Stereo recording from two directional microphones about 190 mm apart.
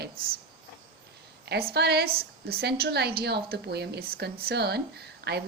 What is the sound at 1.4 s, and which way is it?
Speech, 60° right (ahead or behind).